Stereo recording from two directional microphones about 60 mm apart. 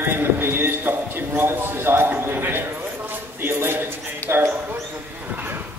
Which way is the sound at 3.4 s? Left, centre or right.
Right.